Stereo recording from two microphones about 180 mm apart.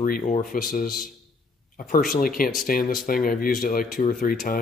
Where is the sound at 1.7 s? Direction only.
50° left (ahead or behind).